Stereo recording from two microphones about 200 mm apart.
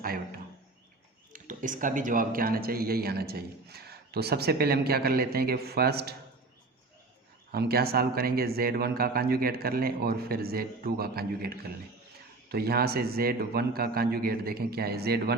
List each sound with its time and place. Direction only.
1.3 s speech: 40° right (ahead or behind)
7.5 s speech: 50° right (ahead or behind)